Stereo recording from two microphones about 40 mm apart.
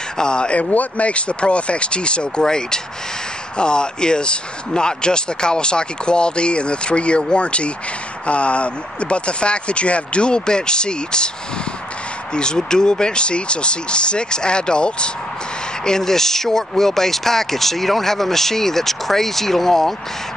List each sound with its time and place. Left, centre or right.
0.2 s speech: left
0.6 s speech: left
12.4 s speech: centre